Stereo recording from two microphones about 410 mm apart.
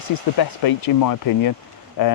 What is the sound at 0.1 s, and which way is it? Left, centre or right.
Speech, left.